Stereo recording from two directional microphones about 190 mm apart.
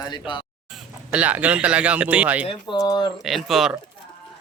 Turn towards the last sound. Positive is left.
turn(degrees=0)  # may be behind; listen again after turning